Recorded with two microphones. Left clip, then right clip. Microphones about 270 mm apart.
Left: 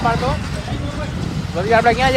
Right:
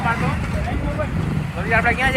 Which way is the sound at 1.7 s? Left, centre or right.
Left.